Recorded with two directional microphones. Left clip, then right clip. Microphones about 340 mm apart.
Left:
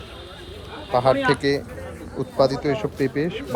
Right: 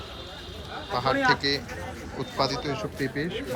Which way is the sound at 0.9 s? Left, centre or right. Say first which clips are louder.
Left 5 dB; centre.